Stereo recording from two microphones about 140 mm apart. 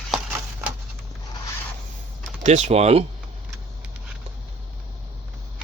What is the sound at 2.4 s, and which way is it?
Speech, 55° right (ahead or behind).